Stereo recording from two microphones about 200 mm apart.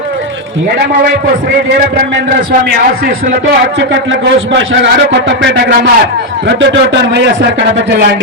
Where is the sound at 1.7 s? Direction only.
55° right (ahead or behind).